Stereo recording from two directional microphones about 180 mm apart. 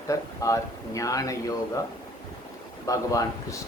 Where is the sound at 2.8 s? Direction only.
20° left (ahead or behind).